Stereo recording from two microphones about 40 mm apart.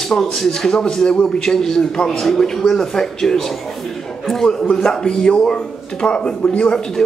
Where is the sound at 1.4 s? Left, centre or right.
Centre.